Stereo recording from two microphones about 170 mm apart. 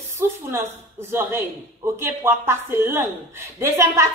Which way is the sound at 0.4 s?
15° right (ahead or behind).